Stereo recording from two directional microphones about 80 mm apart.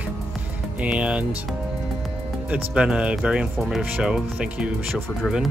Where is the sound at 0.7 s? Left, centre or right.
Centre.